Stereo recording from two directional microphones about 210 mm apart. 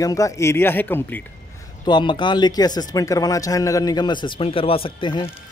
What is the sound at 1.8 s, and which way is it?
Speech, 20° left (ahead or behind).